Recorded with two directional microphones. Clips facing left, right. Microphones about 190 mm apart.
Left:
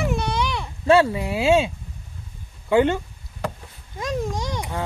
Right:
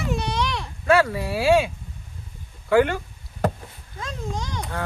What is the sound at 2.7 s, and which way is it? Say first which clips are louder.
Speech: left 1 dB; 20° left (ahead or behind).